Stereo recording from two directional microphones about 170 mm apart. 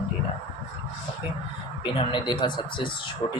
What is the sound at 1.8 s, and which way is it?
Speech, 30° left (ahead or behind).